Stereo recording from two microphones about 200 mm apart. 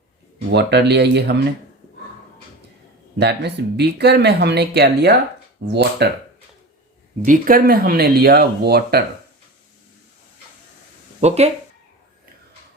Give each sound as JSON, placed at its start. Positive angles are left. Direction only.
{"t": 0.5, "sound": "speech", "side_deg": -55}
{"t": 3.2, "sound": "speech", "side_deg": -55}
{"t": 7.2, "sound": "speech", "side_deg": -45}
{"t": 11.2, "sound": "speech", "side_deg": -35}